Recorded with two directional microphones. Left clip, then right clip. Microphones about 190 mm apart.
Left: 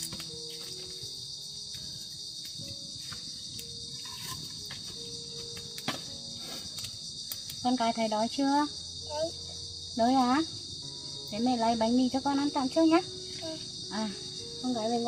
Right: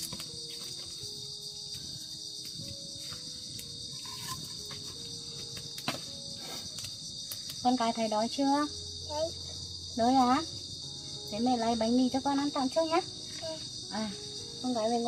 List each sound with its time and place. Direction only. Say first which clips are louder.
7.6 s speech: even; 10° right (ahead or behind)
10.0 s speech: even; 10° right (ahead or behind)
14.7 s speech: right 1 dB; 15° right (ahead or behind)